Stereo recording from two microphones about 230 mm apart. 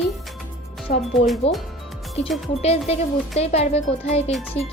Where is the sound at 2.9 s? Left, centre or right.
Left.